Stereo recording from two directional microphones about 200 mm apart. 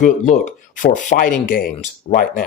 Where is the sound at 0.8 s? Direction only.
45° left (ahead or behind).